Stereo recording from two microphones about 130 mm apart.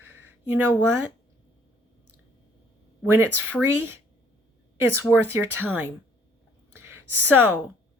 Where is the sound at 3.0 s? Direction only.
20° right (ahead or behind).